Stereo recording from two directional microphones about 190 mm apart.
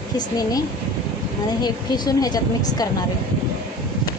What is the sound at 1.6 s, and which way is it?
A woman's voice, 20° left (ahead or behind).